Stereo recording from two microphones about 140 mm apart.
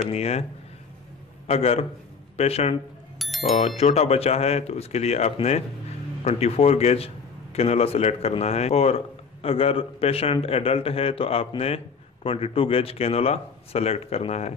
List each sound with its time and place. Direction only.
0.1 s a man's voice: 50° left (ahead or behind)
1.5 s a man's voice: 45° left (ahead or behind)
3.2 s bicycle bell: centre (ahead or behind)
3.7 s a man's voice: 50° left (ahead or behind)